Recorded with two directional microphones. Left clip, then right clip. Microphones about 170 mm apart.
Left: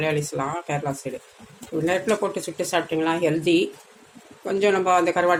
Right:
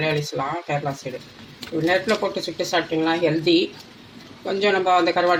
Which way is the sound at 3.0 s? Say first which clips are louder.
Right 2 dB; 30° left (ahead or behind).